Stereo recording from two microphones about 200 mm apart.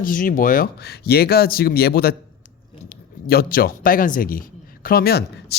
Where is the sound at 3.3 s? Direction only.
50° left (ahead or behind).